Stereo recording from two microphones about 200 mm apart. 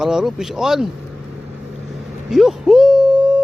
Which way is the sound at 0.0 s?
5° right (ahead or behind).